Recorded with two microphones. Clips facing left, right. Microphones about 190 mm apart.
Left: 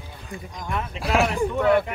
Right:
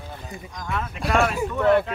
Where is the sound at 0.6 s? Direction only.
15° left (ahead or behind).